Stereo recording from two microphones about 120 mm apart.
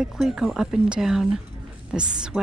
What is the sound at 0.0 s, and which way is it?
Speech, 5° right (ahead or behind).